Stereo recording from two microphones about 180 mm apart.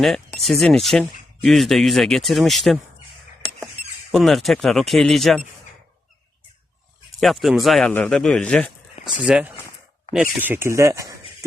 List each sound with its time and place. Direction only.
0.4 s speech: centre (ahead or behind)
4.1 s speech: centre (ahead or behind)
7.2 s speech: centre (ahead or behind)
9.0 s a sound: 30° left (ahead or behind)
9.2 s speech: 5° right (ahead or behind)